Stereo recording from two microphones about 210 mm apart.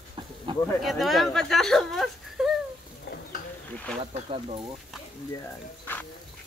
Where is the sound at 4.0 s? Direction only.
25° right (ahead or behind).